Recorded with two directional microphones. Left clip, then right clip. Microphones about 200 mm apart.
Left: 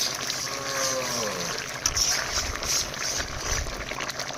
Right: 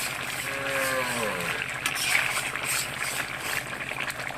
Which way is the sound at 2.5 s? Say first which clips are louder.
Left 1 dB; 30° left (ahead or behind).